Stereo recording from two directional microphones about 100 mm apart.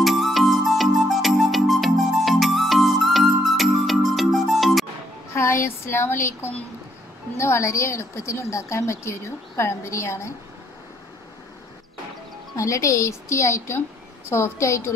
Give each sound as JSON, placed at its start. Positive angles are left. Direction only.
{"t": 0.0, "sound": "music", "side_deg": 0}
{"t": 5.3, "sound": "a woman's voice", "side_deg": 25}
{"t": 12.5, "sound": "a woman's voice", "side_deg": 30}